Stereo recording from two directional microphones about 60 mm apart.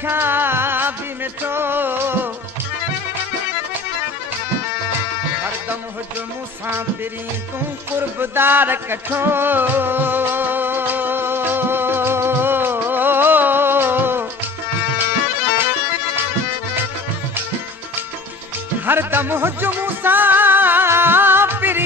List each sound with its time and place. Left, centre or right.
0.0 s music: right
7.9 s music: right
18.9 s music: right